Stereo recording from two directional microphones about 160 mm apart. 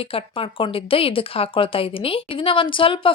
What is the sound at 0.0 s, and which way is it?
A woman's voice, 35° left (ahead or behind).